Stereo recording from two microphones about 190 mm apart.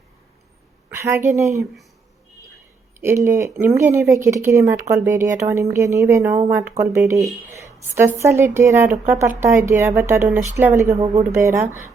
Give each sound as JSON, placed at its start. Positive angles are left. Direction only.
{"t": 0.9, "sound": "speech", "side_deg": -15}
{"t": 3.0, "sound": "speech", "side_deg": -15}